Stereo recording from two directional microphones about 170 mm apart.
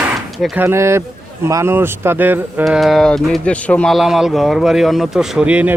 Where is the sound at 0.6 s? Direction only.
15° right (ahead or behind).